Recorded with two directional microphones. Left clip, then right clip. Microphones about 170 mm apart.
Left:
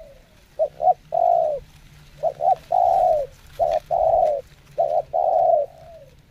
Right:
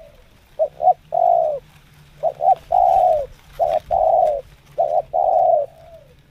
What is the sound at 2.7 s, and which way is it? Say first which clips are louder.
Bird: right 2 dB; 10° left (ahead or behind).